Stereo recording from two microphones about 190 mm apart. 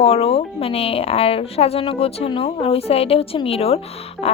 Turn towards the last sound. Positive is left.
turn(degrees=30)  # may be behind; listen again after turning